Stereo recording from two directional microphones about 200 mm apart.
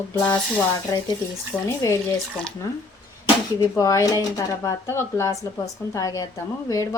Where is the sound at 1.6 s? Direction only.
15° left (ahead or behind).